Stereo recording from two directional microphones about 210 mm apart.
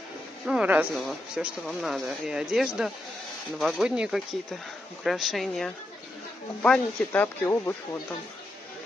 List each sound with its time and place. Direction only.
0.5 s speech: 5° right (ahead or behind); by 7.7 s 10° left (ahead or behind)